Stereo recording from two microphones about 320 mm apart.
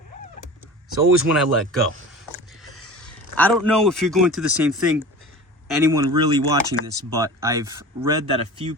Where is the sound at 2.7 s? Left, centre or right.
Left.